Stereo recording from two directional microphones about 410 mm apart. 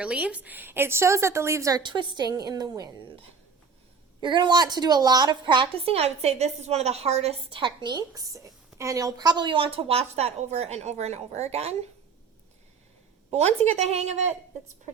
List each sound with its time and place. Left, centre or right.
0.0 s a woman's voice: centre
13.3 s a woman's voice: centre